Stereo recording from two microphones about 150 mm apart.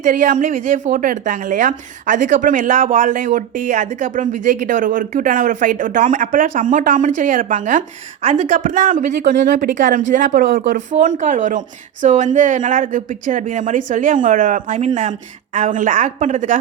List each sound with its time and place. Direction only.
0.0 s a woman's voice: 60° right (ahead or behind)
9.6 s speech: 80° right
10.9 s a woman's voice: 55° right (ahead or behind)